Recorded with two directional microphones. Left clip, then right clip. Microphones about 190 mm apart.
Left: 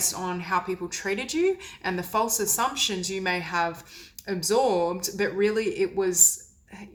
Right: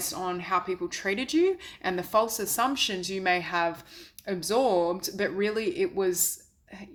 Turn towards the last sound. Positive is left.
turn(degrees=-35)  # may be behind; listen again after turning